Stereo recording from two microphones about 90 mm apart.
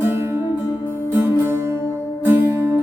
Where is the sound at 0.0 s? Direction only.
25° right (ahead or behind).